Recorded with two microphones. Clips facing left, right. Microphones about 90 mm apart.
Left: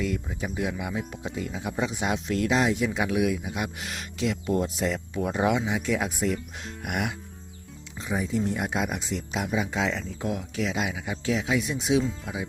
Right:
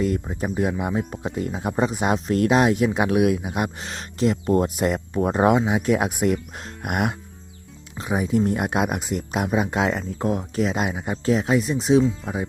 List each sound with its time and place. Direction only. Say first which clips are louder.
0.0 s speech: right 6 dB; 45° right (ahead or behind)
3.8 s speech: right 6 dB; 35° right (ahead or behind); by 7.2 s 50° right (ahead or behind)
7.9 s speech: right 6 dB; 60° right (ahead or behind); by 12.5 s 45° right (ahead or behind)